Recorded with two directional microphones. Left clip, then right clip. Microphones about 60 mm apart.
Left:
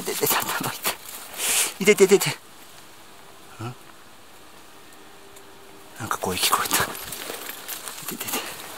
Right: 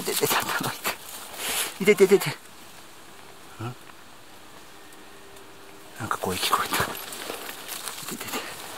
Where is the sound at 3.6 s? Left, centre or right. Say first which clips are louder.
Left 1 dB; left.